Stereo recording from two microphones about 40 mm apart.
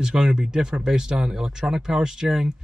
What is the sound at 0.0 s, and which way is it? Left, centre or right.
Speech, centre.